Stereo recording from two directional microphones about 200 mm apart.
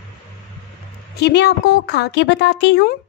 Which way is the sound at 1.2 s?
55° left (ahead or behind).